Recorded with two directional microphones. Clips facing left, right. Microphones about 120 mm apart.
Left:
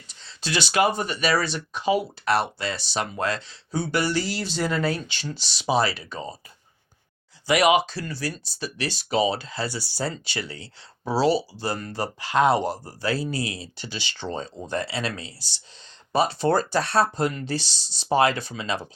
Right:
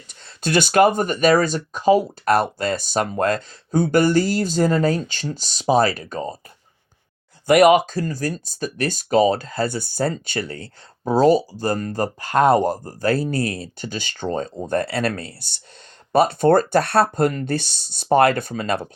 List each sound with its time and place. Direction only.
0.1 s speech: 55° right (ahead or behind)
7.4 s speech: 50° right (ahead or behind)